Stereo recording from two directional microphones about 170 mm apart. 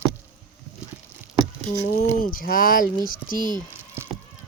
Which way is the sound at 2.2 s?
55° left (ahead or behind).